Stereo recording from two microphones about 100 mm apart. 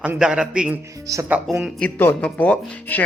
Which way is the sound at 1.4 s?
5° right (ahead or behind).